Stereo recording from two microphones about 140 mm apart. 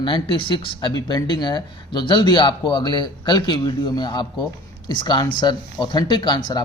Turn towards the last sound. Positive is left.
turn(degrees=35)  # may be behind; listen again after turning